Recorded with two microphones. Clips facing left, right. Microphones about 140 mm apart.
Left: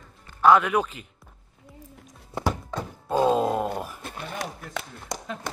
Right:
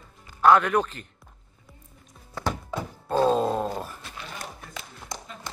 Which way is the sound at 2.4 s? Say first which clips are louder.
Left 3 dB; 20° left (ahead or behind).